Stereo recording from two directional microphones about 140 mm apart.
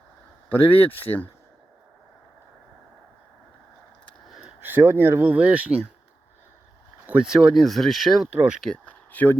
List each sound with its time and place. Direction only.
0.5 s speech: 15° left (ahead or behind)
4.3 s speech: 5° right (ahead or behind)
7.1 s speech: 5° right (ahead or behind)
8.6 s speech: 10° left (ahead or behind)